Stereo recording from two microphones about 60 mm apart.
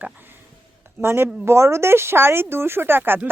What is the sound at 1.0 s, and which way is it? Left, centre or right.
Speech, right.